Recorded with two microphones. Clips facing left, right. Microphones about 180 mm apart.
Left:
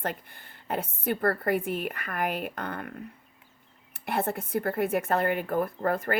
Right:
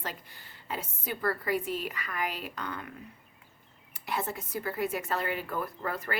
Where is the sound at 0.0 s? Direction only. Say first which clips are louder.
Left 7 dB; 55° left (ahead or behind).